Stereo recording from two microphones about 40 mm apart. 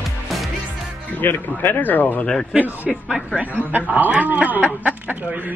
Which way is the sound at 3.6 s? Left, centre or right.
Right.